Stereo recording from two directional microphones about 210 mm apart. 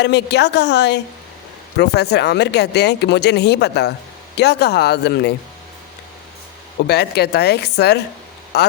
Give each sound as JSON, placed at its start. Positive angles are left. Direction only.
{"t": 0.0, "sound": "speech", "side_deg": 55}
{"t": 6.8, "sound": "speech", "side_deg": 50}